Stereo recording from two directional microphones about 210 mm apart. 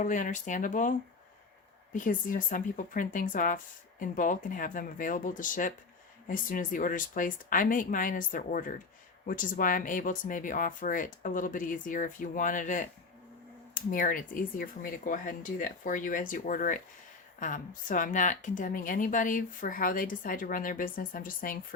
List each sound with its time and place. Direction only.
0.0 s speech: 35° left (ahead or behind)